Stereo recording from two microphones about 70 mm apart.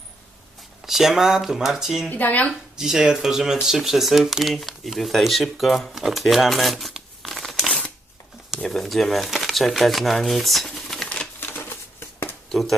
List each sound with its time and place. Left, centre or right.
0.9 s speech: centre
2.0 s speech: left
2.5 s speech: centre
6.1 s crumpling: centre
8.4 s speech: centre
11.3 s a sound: left
12.5 s speech: centre